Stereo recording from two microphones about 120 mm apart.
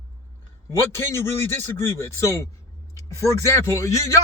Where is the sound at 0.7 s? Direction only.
20° left (ahead or behind).